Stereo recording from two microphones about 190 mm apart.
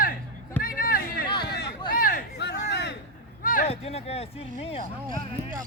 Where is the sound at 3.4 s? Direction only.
45° left (ahead or behind).